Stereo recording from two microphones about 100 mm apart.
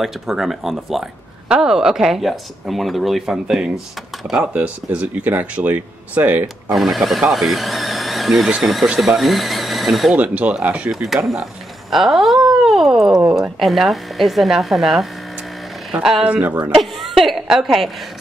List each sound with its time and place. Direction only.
0.0 s speech: 5° right (ahead or behind)
6.4 s speech: centre (ahead or behind)
10.1 s speech: 15° right (ahead or behind)
16.3 s speech: 20° right (ahead or behind)
16.7 s a sound: centre (ahead or behind)